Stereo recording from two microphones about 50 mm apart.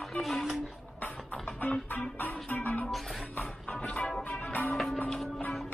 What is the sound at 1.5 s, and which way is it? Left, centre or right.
Music, left.